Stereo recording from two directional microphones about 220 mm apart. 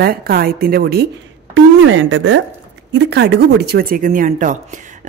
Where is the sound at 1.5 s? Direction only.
60° right (ahead or behind).